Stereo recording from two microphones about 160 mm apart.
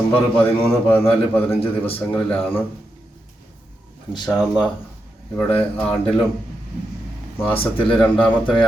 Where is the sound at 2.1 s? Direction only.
5° left (ahead or behind).